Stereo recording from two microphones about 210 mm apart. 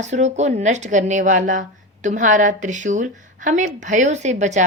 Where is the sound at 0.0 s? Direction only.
35° right (ahead or behind).